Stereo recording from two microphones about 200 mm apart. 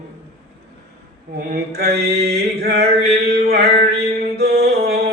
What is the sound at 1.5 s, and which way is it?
Mantra, 50° right (ahead or behind).